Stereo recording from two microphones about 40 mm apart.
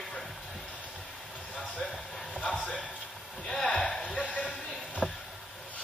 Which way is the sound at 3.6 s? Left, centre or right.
Left.